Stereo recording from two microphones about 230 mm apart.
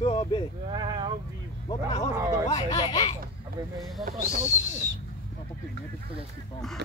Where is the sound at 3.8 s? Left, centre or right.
Centre.